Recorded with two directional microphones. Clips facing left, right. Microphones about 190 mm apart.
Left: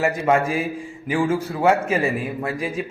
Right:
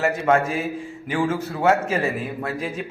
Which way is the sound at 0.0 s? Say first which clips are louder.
Even; 10° left (ahead or behind).